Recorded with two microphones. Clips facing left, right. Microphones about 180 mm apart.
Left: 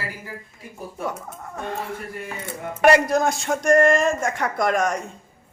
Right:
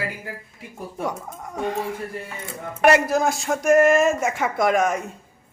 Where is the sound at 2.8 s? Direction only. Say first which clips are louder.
Left 1 dB; centre (ahead or behind).